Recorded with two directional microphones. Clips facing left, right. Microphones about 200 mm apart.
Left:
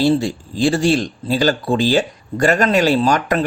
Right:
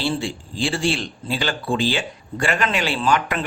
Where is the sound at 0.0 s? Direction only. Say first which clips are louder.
Left 8 dB; 40° left (ahead or behind).